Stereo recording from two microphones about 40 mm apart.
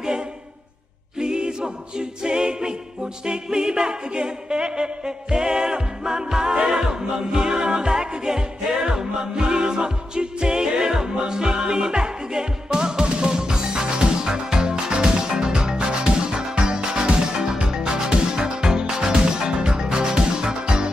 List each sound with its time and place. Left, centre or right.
1.1 s a capella: right
6.5 s music: centre